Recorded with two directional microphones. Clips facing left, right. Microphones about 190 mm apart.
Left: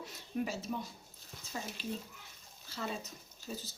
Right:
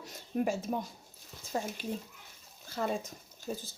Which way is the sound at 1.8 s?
50° right (ahead or behind).